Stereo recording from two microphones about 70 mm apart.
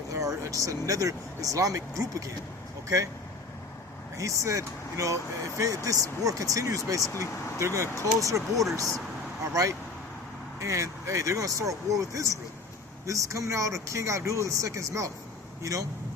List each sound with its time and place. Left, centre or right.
0.1 s speech: right
4.2 s speech: right